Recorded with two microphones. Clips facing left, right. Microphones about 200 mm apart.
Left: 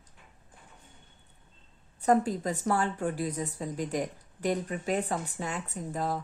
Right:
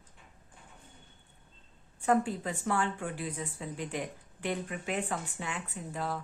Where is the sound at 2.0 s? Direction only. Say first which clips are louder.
Left 3 dB; 40° left (ahead or behind).